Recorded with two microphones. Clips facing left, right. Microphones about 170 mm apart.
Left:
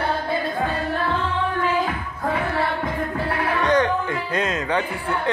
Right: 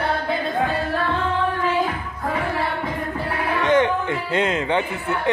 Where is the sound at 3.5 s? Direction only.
20° right (ahead or behind).